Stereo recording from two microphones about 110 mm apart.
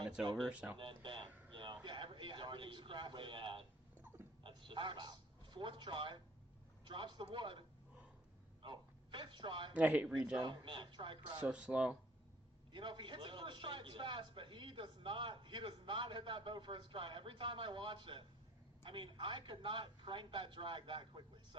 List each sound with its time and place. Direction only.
0.3 s speech: centre (ahead or behind)
0.8 s speech: 50° right (ahead or behind)
1.5 s a sound: 45° right (ahead or behind)
4.4 s a man's voice: 50° right (ahead or behind)
8.6 s speech: 50° right (ahead or behind)
9.7 s speech: 10° right (ahead or behind)
10.3 s a man's voice: 40° right (ahead or behind)
11.4 s speech: 10° right (ahead or behind)
12.7 s a man's voice: 45° right (ahead or behind)